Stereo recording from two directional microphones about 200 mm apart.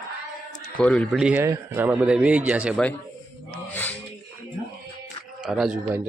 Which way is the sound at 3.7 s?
10° left (ahead or behind).